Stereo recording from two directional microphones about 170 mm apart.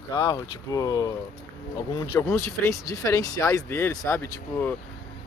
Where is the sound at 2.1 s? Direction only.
15° left (ahead or behind).